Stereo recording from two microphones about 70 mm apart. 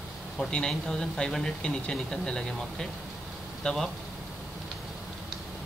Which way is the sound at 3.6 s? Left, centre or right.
Centre.